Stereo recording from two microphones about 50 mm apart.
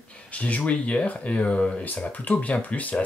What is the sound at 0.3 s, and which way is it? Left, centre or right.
Speech, left.